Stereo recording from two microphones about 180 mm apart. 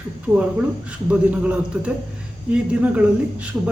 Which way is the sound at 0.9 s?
5° right (ahead or behind).